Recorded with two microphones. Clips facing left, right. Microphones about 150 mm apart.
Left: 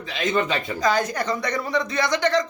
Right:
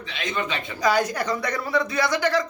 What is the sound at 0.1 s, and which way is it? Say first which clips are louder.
Speech: left 5 dB; 45° left (ahead or behind).